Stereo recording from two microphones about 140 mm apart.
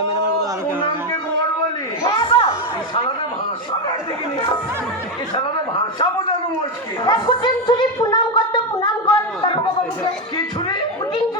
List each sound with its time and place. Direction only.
2.0 s a sound: 35° left (ahead or behind)
7.0 s gargling: 35° left (ahead or behind)
10.0 s chatter: 30° left (ahead or behind)